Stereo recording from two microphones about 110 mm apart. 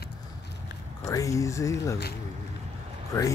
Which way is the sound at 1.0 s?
30° left (ahead or behind).